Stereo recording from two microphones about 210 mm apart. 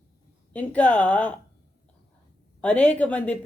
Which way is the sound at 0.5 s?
5° left (ahead or behind).